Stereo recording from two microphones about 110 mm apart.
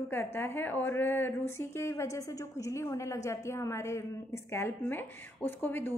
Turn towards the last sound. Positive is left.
turn(degrees=20)  # may be behind; listen again after turning